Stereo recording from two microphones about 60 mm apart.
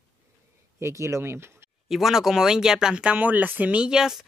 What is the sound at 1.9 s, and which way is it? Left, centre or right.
Speech, centre.